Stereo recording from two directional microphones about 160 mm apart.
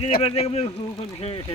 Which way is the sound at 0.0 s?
40° left (ahead or behind).